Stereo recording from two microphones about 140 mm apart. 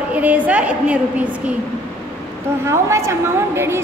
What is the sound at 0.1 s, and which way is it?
Speech, 10° right (ahead or behind).